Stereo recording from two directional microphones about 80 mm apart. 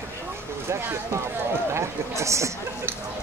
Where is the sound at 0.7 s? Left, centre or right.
Right.